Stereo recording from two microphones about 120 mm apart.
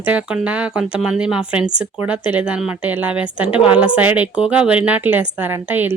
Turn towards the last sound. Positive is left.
turn(degrees=-15)  # may be behind; listen again after turning